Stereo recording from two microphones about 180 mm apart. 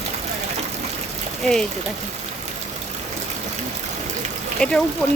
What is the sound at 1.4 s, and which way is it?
Speech, 5° left (ahead or behind).